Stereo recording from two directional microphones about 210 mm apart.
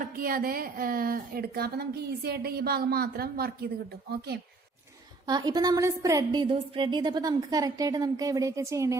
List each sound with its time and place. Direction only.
0.0 s speech: 45° right (ahead or behind)
5.2 s a woman's voice: 20° right (ahead or behind)